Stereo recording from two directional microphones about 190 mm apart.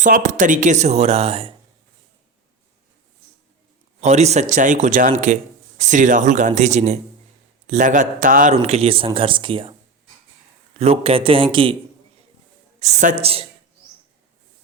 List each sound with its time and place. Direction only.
0.0 s a man's voice: 40° right (ahead or behind)
4.0 s a man's voice: 35° right (ahead or behind)
8.6 s speech: 30° right (ahead or behind)
10.8 s speech: 30° right (ahead or behind)
12.8 s a man's voice: 40° right (ahead or behind)